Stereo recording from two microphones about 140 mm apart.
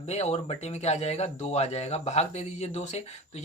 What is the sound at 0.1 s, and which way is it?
Speech, 50° left (ahead or behind).